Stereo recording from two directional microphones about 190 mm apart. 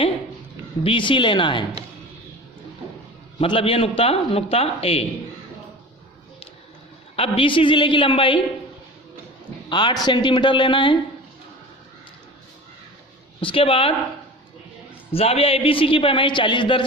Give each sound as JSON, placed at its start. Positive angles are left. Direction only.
{"t": 0.9, "sound": "a man's voice", "side_deg": 25}
{"t": 3.4, "sound": "a man's voice", "side_deg": 30}
{"t": 7.2, "sound": "a man's voice", "side_deg": 30}
{"t": 9.6, "sound": "a man's voice", "side_deg": 25}
{"t": 13.4, "sound": "a man's voice", "side_deg": 30}
{"t": 15.1, "sound": "a man's voice", "side_deg": 30}